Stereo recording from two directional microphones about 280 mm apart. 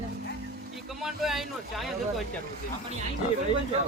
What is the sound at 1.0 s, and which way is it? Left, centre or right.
Speech, centre.